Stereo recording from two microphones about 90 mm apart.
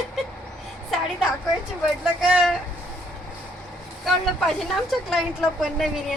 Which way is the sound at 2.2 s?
5° right (ahead or behind).